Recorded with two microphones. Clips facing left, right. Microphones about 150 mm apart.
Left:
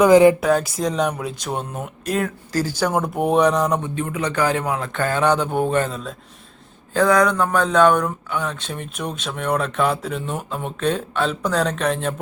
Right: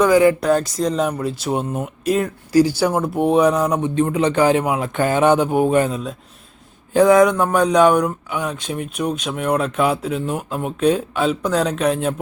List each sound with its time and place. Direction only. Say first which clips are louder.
0.0 s speech: left 2 dB; 20° left (ahead or behind)
0.3 s speech: right 1 dB; centre (ahead or behind)
2.9 s speech: right 2 dB; centre (ahead or behind)
3.9 s speech: right 6 dB; 35° right (ahead or behind); by 6.1 s 10° right (ahead or behind)
6.9 s speech: right 5 dB; 20° right (ahead or behind)